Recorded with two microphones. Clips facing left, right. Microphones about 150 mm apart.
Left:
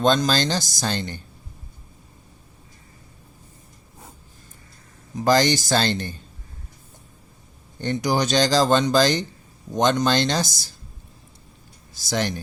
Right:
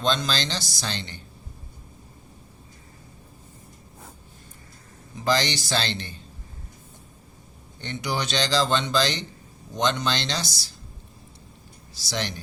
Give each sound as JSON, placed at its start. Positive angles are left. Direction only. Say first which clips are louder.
{"t": 0.0, "sound": "speech", "louder": "left 6 dB", "side_deg": 45}
{"t": 5.2, "sound": "speech", "louder": "left 6 dB", "side_deg": 45}
{"t": 7.8, "sound": "speech", "louder": "left 7 dB", "side_deg": 45}
{"t": 11.9, "sound": "speech", "louder": "left 6 dB", "side_deg": 50}